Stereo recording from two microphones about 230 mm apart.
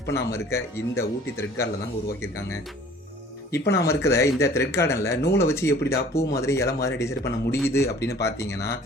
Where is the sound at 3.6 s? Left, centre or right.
Left.